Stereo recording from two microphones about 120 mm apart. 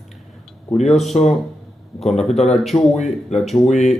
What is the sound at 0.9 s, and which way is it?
Speech, centre (ahead or behind).